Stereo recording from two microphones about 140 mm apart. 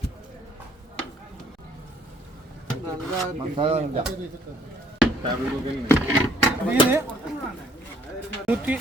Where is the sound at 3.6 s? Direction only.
45° right (ahead or behind).